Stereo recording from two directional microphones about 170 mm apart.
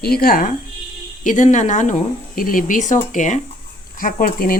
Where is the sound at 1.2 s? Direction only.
45° left (ahead or behind).